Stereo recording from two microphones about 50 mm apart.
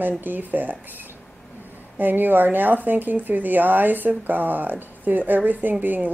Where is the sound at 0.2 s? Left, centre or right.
Right.